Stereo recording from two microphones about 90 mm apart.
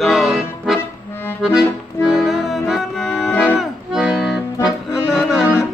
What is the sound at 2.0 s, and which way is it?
Music, 5° right (ahead or behind).